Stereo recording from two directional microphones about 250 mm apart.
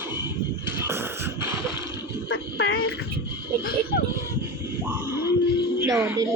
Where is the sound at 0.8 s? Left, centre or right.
Centre.